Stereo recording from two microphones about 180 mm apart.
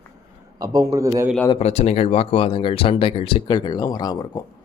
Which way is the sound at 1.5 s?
40° left (ahead or behind).